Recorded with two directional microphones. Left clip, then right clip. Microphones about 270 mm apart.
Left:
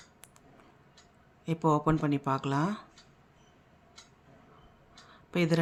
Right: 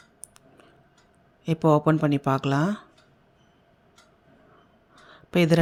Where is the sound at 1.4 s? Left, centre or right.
Centre.